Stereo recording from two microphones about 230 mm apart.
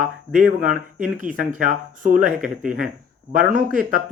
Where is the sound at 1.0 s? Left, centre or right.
Right.